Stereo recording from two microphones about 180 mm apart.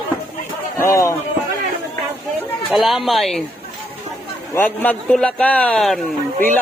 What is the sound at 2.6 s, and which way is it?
Speech, centre (ahead or behind).